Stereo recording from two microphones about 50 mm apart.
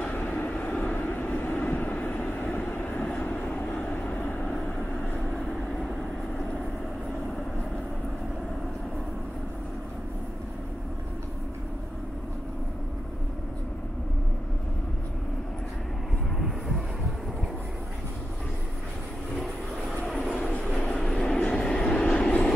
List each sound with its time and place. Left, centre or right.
0.0 s vehicle: left
16.3 s vehicle: centre
20.1 s vehicle: centre
20.4 s train: left
20.7 s vehicle: centre
21.4 s train: centre